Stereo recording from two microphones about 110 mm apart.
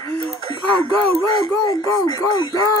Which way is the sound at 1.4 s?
35° left (ahead or behind).